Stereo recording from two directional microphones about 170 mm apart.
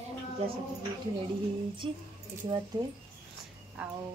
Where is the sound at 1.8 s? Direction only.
30° right (ahead or behind).